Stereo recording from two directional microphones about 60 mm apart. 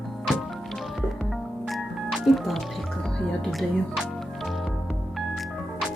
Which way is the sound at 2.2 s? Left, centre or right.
Centre.